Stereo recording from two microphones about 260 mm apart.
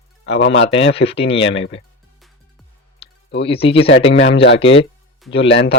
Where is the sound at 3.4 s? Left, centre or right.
Left.